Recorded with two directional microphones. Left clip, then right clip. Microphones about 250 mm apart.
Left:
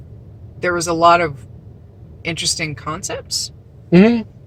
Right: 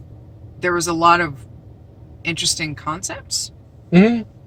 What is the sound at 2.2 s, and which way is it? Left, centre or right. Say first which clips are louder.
Speech: even; centre.